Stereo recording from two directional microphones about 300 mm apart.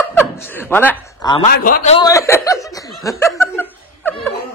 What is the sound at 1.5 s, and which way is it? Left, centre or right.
Speech, left.